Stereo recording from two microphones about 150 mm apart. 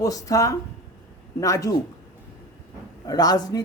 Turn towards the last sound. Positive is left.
turn(degrees=25)  # may be behind; listen again after turning